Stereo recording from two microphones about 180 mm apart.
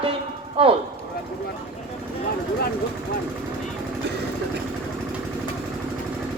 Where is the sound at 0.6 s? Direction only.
30° right (ahead or behind).